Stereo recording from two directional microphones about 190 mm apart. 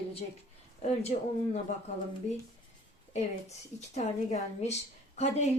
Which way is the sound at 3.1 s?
35° left (ahead or behind).